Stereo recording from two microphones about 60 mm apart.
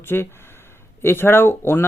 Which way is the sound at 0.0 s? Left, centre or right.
Left.